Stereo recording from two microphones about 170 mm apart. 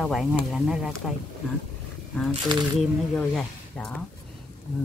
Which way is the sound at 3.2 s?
5° left (ahead or behind).